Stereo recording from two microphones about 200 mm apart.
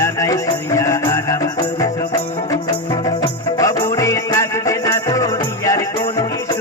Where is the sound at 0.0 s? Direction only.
15° left (ahead or behind).